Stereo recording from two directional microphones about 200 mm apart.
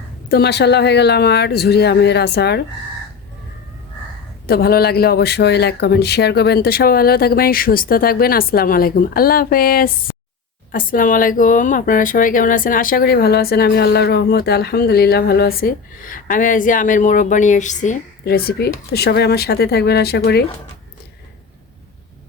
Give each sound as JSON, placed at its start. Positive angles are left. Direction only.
{"t": 0.3, "sound": "speech", "side_deg": 55}
{"t": 4.4, "sound": "speech", "side_deg": 50}